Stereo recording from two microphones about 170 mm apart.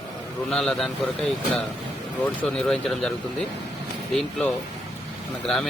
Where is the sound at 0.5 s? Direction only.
Centre (ahead or behind).